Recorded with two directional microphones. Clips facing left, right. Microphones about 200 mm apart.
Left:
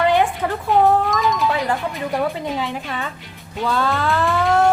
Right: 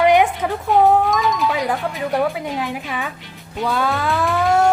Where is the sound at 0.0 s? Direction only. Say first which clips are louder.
Right 3 dB; 15° right (ahead or behind).